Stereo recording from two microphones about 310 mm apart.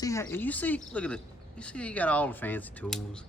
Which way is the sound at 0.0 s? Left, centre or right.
Centre.